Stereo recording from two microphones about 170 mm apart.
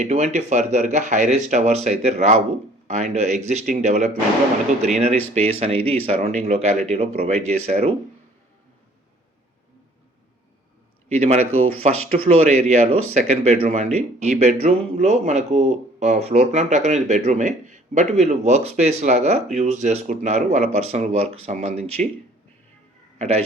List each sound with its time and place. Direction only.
0.0 s speech: 45° right (ahead or behind)
11.2 s speech: 35° right (ahead or behind)
23.1 s speech: 40° right (ahead or behind)